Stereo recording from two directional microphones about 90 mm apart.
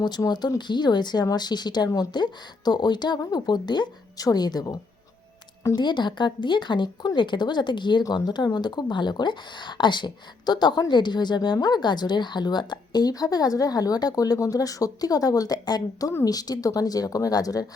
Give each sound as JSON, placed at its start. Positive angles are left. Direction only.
{"t": 0.3, "sound": "speech", "side_deg": 50}
{"t": 5.7, "sound": "speech", "side_deg": 55}